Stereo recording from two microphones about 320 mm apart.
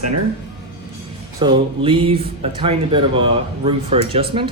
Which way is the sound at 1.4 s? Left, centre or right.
Centre.